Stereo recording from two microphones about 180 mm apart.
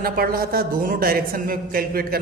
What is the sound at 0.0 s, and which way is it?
A woman's voice, 55° right (ahead or behind).